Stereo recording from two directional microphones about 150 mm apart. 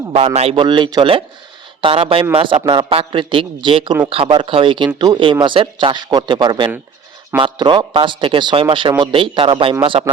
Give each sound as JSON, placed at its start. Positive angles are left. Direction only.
{"t": 0.1, "sound": "a man's voice", "side_deg": -40}